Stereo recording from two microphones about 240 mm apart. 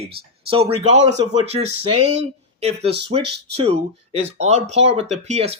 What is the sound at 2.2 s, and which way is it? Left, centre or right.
Speech, right.